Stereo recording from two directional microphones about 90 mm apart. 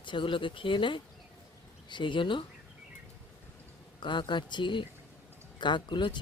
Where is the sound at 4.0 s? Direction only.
60° left (ahead or behind).